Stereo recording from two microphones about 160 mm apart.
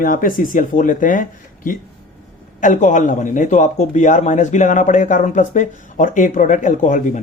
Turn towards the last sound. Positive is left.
turn(degrees=50)  # may be behind; listen again after turning